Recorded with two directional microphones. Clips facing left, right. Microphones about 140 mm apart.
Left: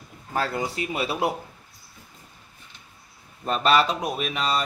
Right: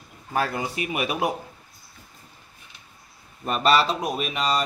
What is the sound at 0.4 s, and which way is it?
Speech, 15° right (ahead or behind).